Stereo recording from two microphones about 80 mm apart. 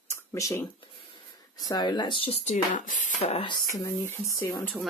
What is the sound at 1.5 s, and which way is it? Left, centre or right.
Speech, left.